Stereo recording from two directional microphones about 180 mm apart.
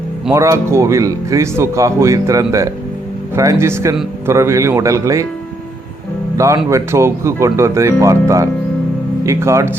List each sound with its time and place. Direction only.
0.3 s speech: 15° right (ahead or behind)
6.3 s speech: 15° right (ahead or behind)